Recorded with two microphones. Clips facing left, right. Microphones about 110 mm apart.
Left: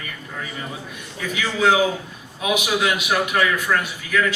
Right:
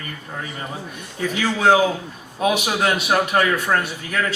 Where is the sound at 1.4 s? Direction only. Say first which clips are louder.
Right 2 dB; 35° right (ahead or behind).